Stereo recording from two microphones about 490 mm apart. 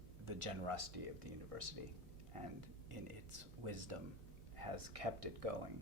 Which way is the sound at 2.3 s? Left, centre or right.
Right.